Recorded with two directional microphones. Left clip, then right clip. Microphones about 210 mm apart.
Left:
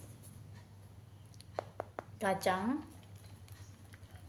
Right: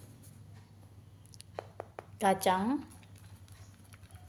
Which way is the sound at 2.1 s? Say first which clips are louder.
Right 5 dB; 40° right (ahead or behind).